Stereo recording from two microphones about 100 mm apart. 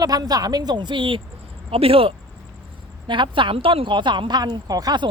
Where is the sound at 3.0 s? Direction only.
50° right (ahead or behind).